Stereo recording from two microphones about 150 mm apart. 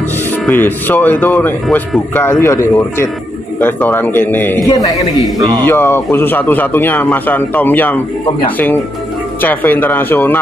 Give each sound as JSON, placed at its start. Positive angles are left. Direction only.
{"t": 0.5, "sound": "speech", "side_deg": 15}
{"t": 4.6, "sound": "a man's voice", "side_deg": 25}
{"t": 9.4, "sound": "speech", "side_deg": 10}